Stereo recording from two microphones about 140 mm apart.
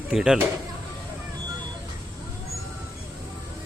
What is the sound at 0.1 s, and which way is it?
Speech, 5° right (ahead or behind).